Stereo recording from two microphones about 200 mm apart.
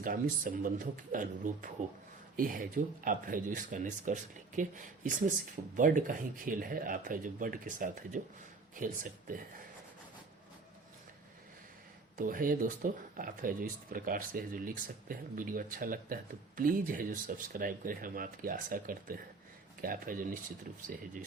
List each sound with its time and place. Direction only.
0.0 s speech: 45° right (ahead or behind)
12.1 s speech: 45° right (ahead or behind)